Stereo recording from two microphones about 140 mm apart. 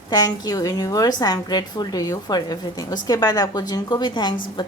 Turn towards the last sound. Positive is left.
turn(degrees=30)  # may be behind; listen again after turning